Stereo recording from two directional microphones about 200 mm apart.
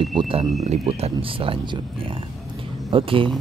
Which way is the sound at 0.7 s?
30° right (ahead or behind).